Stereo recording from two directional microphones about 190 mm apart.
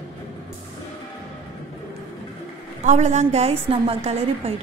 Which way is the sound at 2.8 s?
40° right (ahead or behind).